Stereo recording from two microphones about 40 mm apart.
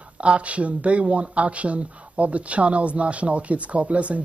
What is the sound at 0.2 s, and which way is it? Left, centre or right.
Speech, right.